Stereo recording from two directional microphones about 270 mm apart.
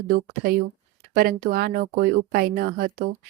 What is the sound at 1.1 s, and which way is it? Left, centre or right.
Speech, right.